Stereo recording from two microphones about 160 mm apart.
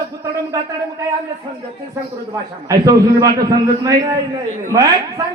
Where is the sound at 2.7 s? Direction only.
20° right (ahead or behind).